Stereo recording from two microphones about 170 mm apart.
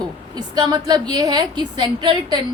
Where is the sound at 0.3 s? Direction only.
25° right (ahead or behind).